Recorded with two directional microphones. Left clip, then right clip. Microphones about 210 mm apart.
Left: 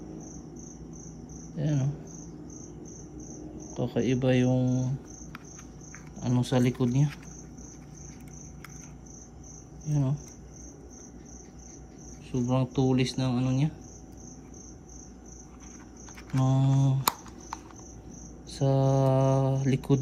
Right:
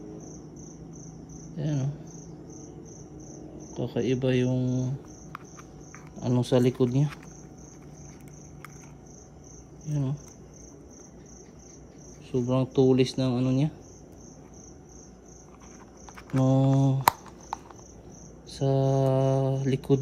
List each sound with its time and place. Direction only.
1.5 s speech: 15° right (ahead or behind)
3.8 s speech: 10° right (ahead or behind)
6.1 s speech: 25° right (ahead or behind)
9.8 s speech: 15° right (ahead or behind)
12.3 s speech: 20° right (ahead or behind)
16.3 s typing: 25° right (ahead or behind)
18.5 s speech: 15° right (ahead or behind)